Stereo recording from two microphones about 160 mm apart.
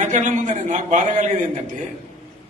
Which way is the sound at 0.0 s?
50° right (ahead or behind).